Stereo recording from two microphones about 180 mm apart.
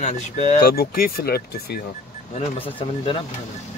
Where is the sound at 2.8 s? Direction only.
30° left (ahead or behind).